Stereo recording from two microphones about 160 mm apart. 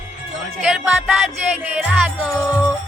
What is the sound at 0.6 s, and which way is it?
Music, 5° right (ahead or behind).